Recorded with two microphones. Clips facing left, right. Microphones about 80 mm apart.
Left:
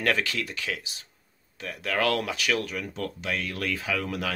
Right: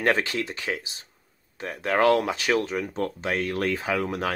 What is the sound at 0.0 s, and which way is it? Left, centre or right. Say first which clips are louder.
Speech: right 3 dB; right.